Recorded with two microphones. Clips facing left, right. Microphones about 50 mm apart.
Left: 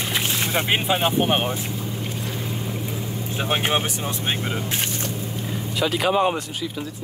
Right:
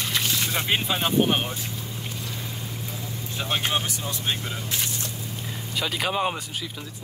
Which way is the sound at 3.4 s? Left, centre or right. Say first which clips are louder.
Left 4 dB; left.